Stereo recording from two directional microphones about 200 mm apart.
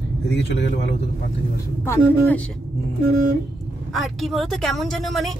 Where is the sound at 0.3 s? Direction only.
55° left (ahead or behind).